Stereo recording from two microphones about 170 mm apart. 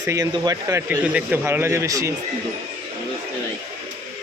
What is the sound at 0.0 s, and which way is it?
A man's voice, 20° right (ahead or behind).